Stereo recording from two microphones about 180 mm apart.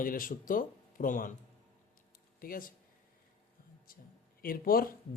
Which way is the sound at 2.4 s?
55° left (ahead or behind).